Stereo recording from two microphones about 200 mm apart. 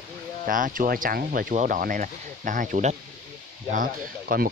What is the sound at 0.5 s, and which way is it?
Speech, 45° right (ahead or behind).